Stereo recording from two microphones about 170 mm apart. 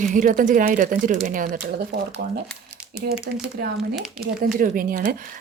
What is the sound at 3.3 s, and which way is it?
Speech, 70° right (ahead or behind).